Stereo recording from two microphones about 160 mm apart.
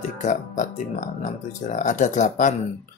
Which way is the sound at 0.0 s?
50° left (ahead or behind).